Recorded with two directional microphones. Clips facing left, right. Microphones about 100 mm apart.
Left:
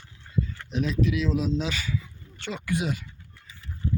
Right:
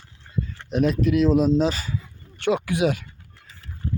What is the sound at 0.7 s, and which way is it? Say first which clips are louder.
Speech: right 6 dB; 55° right (ahead or behind).